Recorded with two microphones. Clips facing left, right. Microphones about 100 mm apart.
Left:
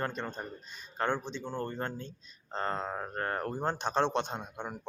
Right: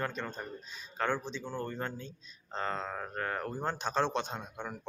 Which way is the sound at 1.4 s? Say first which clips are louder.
Left 1 dB; 20° left (ahead or behind).